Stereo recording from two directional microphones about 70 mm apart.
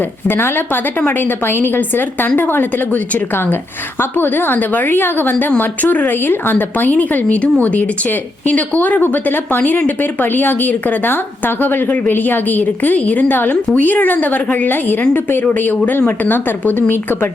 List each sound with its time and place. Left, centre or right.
0.3 s speech: left